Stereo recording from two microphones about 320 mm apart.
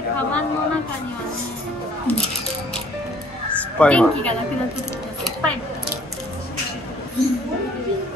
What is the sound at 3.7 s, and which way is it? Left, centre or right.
Speech, centre.